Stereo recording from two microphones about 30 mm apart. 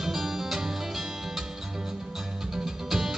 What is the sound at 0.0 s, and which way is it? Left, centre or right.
Music, centre.